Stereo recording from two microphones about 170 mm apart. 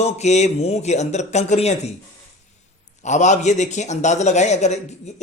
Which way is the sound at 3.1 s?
45° left (ahead or behind).